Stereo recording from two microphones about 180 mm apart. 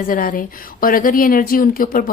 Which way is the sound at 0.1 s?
50° left (ahead or behind).